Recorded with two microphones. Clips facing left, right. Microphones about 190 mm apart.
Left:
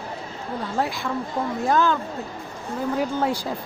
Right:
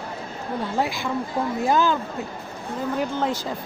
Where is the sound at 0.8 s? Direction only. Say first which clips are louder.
Even; centre (ahead or behind).